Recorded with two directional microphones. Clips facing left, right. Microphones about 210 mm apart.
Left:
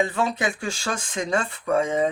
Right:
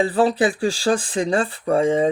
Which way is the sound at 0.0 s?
35° right (ahead or behind).